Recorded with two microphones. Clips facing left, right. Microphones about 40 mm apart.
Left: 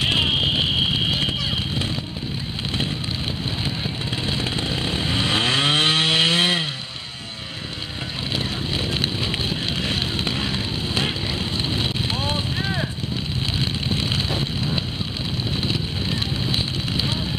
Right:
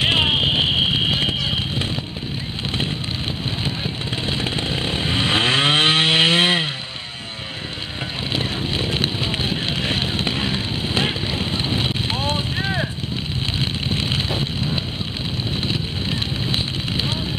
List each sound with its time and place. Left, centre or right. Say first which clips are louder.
0.0 s vehicle: right 3 dB; centre
3.6 s vehicle: right 1 dB; centre
8.4 s vehicle: right 3 dB; centre
15.5 s fire: right 1 dB; centre